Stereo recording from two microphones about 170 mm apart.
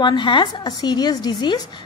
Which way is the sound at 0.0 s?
25° left (ahead or behind).